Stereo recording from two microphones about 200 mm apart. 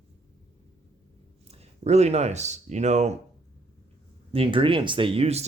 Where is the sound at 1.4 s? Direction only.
30° right (ahead or behind).